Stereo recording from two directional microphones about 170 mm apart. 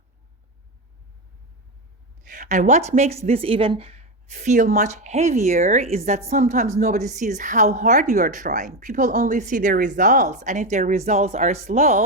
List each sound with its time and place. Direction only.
2.2 s speech: 50° right (ahead or behind)